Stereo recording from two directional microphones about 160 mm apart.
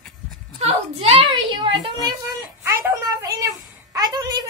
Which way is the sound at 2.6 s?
15° right (ahead or behind).